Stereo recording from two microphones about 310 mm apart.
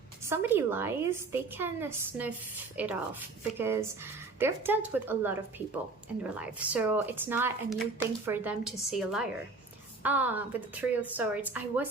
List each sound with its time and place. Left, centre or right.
0.3 s a woman's voice: centre